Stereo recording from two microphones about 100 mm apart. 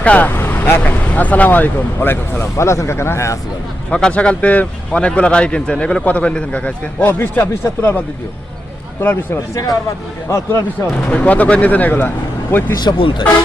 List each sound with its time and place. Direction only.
0.0 s speech: 15° left (ahead or behind)
3.9 s speech: 10° left (ahead or behind)
9.0 s speech: 20° left (ahead or behind)
10.9 s speech: 15° left (ahead or behind)
12.8 s speech: 55° left (ahead or behind)